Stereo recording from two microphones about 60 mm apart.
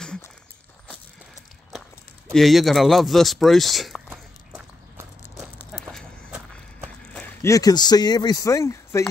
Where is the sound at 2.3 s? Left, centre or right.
Centre.